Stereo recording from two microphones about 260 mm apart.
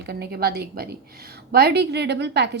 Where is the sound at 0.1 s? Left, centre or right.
Right.